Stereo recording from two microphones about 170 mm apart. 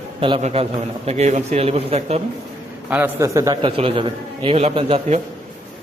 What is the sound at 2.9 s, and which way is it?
Speech, 15° right (ahead or behind).